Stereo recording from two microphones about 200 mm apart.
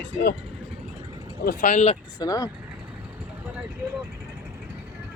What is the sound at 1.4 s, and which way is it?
Speech, 40° left (ahead or behind).